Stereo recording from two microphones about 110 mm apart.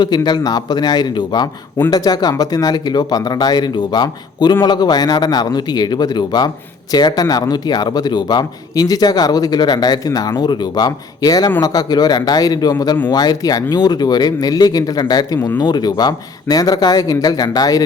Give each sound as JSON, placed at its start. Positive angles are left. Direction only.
{"t": 0.0, "sound": "a man's voice", "side_deg": 40}